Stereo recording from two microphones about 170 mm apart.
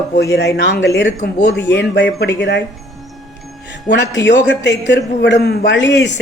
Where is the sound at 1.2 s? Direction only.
65° left (ahead or behind).